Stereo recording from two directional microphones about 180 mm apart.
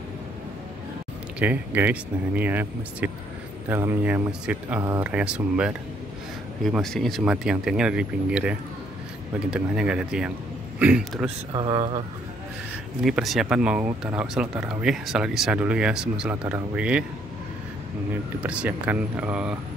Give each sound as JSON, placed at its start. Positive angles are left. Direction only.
{"t": 1.4, "sound": "speech", "side_deg": -10}
{"t": 11.5, "sound": "speech", "side_deg": -25}
{"t": 13.0, "sound": "speech", "side_deg": 0}
{"t": 18.4, "sound": "speech", "side_deg": -10}